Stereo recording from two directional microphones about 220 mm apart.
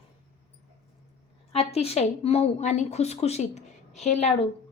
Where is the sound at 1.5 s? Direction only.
30° left (ahead or behind).